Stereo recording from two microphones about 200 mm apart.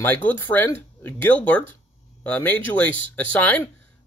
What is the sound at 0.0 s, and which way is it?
Speech, 10° left (ahead or behind).